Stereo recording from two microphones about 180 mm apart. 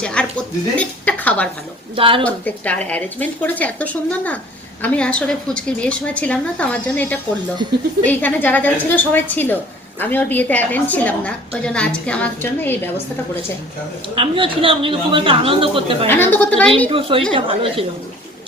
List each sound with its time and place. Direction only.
0.0 s a sound: 5° left (ahead or behind)
2.0 s a man's voice: 30° right (ahead or behind)
2.2 s a woman's voice: 10° left (ahead or behind)
14.2 s a man's voice: 30° right (ahead or behind)
16.0 s a woman's voice: 10° left (ahead or behind)
16.9 s a woman's voice: 30° right (ahead or behind)